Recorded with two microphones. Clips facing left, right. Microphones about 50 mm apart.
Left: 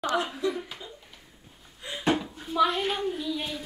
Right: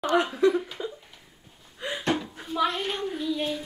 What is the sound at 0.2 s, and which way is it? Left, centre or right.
Speech, right.